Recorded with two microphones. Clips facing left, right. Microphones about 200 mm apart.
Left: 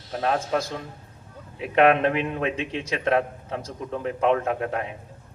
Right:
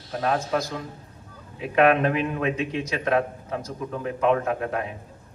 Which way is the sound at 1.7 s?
30° left (ahead or behind).